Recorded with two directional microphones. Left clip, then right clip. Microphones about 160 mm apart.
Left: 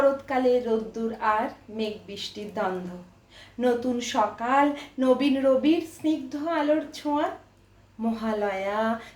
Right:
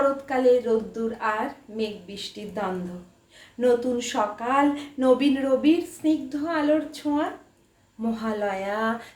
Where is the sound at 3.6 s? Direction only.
10° right (ahead or behind).